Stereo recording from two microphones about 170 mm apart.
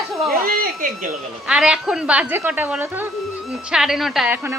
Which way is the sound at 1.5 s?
5° right (ahead or behind).